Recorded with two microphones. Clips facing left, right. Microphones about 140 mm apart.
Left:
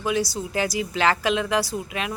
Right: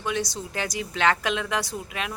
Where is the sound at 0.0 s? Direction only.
5° left (ahead or behind).